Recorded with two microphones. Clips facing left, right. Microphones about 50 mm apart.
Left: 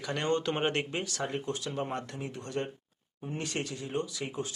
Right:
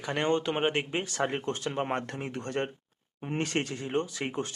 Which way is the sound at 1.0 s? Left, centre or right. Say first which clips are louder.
Right 4 dB; right.